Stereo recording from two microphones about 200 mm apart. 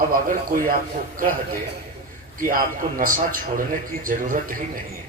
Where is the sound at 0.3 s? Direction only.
45° right (ahead or behind).